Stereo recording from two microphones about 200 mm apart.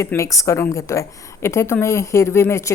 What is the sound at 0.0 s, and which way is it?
Speech, 15° left (ahead or behind).